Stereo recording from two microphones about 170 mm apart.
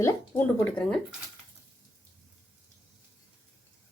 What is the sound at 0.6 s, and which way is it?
Speech, 5° left (ahead or behind).